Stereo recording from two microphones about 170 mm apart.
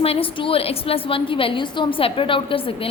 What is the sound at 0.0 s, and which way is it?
A woman's voice, 35° left (ahead or behind).